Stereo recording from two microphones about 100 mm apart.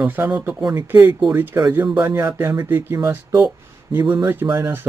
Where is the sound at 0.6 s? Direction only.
40° right (ahead or behind).